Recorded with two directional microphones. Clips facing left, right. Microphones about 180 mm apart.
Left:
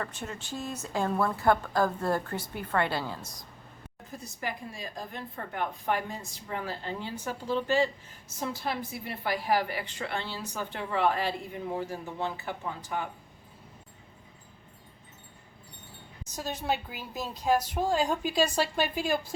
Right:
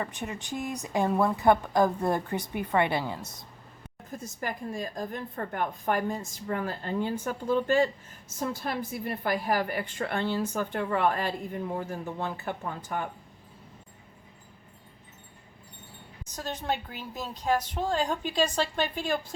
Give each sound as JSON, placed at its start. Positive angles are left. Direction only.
{"t": 0.0, "sound": "a woman's voice", "side_deg": -15}
{"t": 4.1, "sound": "a woman's voice", "side_deg": -45}
{"t": 16.3, "sound": "speech", "side_deg": 10}